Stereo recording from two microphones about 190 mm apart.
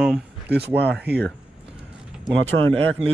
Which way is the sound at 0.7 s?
60° right (ahead or behind).